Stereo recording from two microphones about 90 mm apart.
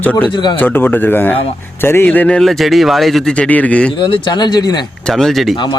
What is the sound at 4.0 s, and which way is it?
Speech, 60° left (ahead or behind).